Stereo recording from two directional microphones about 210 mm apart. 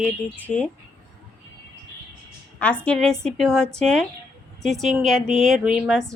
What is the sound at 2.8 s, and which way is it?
A woman's voice, 5° left (ahead or behind).